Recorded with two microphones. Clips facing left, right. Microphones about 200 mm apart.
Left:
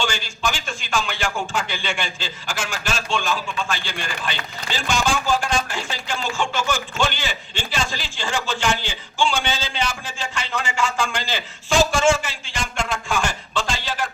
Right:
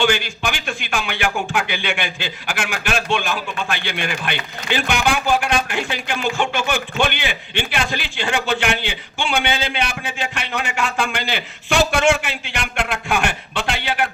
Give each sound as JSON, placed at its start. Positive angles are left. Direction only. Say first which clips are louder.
{"t": 0.0, "sound": "speech", "louder": "right 5 dB", "side_deg": -60}